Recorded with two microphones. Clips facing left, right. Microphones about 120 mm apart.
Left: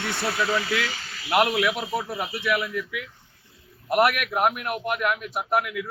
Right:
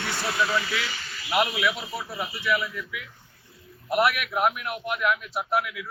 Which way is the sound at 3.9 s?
50° left (ahead or behind).